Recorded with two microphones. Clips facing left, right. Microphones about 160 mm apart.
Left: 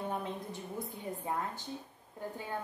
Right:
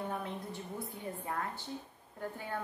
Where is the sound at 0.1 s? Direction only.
20° left (ahead or behind).